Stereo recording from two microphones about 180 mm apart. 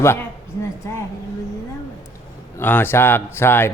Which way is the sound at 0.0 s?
15° left (ahead or behind).